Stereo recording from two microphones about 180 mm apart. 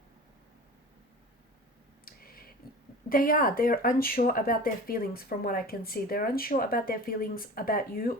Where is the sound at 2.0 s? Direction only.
55° left (ahead or behind).